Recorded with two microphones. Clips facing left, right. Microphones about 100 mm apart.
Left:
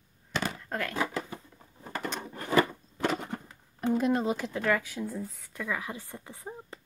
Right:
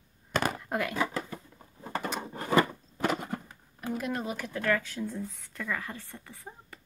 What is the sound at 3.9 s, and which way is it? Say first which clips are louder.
Speech: left 6 dB; 30° left (ahead or behind).